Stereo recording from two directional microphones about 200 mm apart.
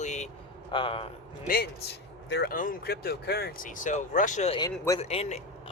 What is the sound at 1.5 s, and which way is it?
A man's voice, 55° left (ahead or behind).